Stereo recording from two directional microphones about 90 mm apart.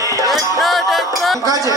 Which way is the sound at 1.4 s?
40° right (ahead or behind).